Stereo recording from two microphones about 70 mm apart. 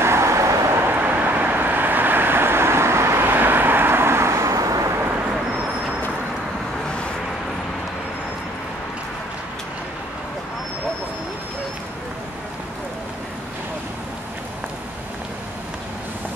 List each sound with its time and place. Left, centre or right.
0.0 s vehicle: right